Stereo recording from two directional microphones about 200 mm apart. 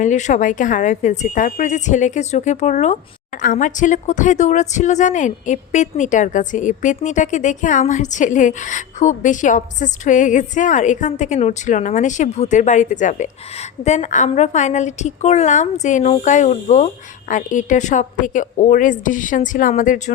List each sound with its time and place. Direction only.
0.0 s a woman's voice: 35° left (ahead or behind)